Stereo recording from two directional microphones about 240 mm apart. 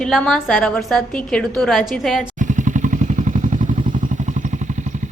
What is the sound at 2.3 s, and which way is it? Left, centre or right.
Vehicle, right.